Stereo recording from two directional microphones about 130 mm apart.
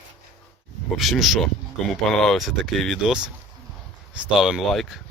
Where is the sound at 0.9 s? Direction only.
Centre (ahead or behind).